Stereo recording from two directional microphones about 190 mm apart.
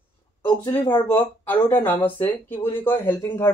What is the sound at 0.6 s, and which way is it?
Speech, 25° left (ahead or behind).